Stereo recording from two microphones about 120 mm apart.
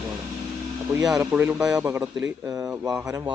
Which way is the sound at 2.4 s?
30° right (ahead or behind).